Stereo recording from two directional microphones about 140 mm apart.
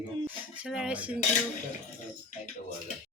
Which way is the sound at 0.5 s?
5° right (ahead or behind).